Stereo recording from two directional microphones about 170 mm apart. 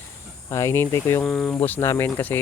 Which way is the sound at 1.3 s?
5° left (ahead or behind).